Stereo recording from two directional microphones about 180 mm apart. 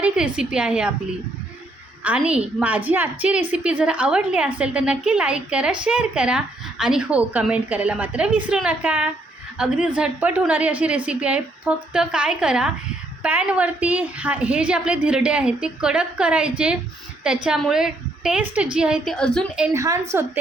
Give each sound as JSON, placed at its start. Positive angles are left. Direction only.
{"t": 0.0, "sound": "a woman's voice", "side_deg": -5}
{"t": 2.0, "sound": "a woman's voice", "side_deg": -5}
{"t": 19.6, "sound": "a woman's voice", "side_deg": -15}